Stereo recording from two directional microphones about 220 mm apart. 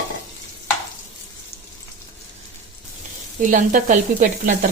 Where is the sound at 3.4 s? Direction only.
35° right (ahead or behind).